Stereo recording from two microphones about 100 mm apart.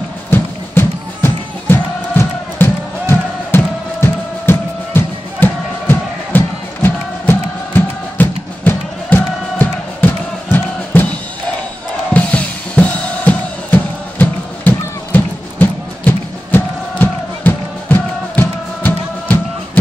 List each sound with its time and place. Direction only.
0.3 s music: 20° left (ahead or behind)
12.1 s drum: 15° left (ahead or behind)